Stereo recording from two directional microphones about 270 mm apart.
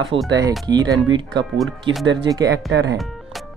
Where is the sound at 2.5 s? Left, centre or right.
Right.